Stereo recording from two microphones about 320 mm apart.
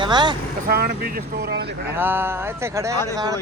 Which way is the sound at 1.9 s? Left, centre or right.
Centre.